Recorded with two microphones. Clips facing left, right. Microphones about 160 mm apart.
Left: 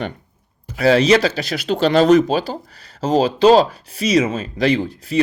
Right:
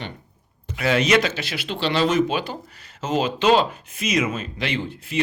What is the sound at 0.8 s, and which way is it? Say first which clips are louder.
Speech: left 6 dB; 35° left (ahead or behind).